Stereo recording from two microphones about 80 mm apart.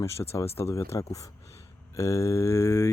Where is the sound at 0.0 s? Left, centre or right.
Left.